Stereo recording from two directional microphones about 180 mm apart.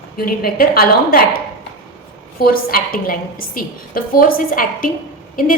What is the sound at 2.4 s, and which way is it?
A woman's voice, 55° left (ahead or behind).